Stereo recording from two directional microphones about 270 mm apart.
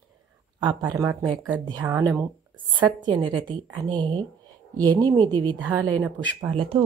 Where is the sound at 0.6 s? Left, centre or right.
Centre.